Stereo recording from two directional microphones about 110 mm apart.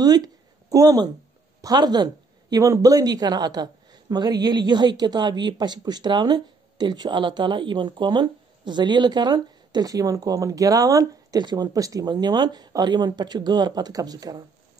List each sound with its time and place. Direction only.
0.0 s speech: 35° right (ahead or behind)